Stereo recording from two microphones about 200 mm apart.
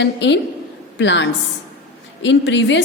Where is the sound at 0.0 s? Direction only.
60° left (ahead or behind).